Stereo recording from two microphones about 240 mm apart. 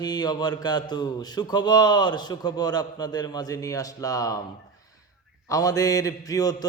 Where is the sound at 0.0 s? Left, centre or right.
Centre.